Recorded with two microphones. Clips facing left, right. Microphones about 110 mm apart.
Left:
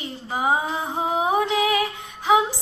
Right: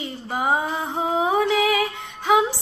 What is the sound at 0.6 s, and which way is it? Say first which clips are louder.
Music: right 1 dB; 15° left (ahead or behind).